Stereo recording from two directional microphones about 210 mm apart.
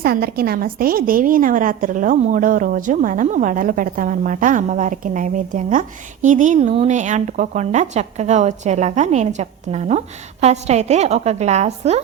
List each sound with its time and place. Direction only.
0.0 s a woman's voice: 45° right (ahead or behind)